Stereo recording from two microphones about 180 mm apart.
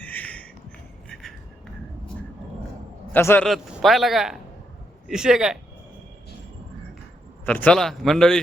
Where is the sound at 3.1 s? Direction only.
10° left (ahead or behind).